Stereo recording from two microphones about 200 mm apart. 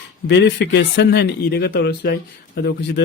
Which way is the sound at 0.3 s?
60° left (ahead or behind).